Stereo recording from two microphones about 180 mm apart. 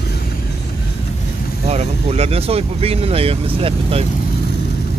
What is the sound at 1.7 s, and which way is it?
Speech, 35° right (ahead or behind).